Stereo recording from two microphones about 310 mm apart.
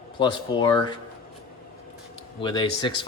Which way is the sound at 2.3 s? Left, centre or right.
Centre.